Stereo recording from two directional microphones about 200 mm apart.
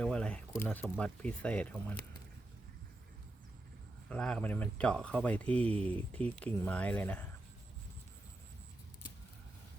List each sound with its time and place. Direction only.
0.0 s squish: 5° left (ahead or behind)
0.6 s speech: 10° left (ahead or behind)
4.1 s speech: 5° left (ahead or behind)